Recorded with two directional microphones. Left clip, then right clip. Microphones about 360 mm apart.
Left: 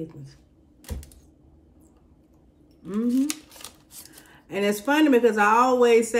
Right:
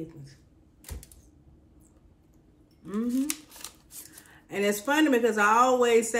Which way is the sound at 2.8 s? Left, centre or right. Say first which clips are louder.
Left 5 dB; centre.